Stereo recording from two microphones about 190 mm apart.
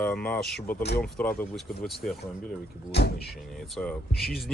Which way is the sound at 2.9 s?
60° left (ahead or behind).